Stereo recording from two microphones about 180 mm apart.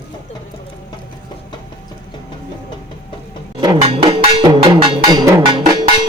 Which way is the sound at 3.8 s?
30° right (ahead or behind).